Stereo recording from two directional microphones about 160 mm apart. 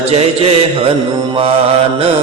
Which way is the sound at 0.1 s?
40° right (ahead or behind).